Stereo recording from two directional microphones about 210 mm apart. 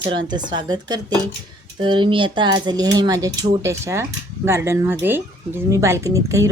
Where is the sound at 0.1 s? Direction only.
20° right (ahead or behind).